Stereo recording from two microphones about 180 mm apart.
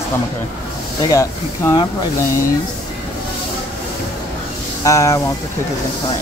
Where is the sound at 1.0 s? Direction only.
20° left (ahead or behind).